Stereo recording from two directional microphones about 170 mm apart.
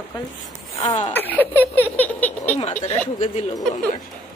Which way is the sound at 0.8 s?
30° left (ahead or behind).